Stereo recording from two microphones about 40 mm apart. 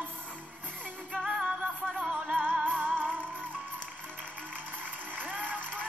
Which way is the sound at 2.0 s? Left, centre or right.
Right.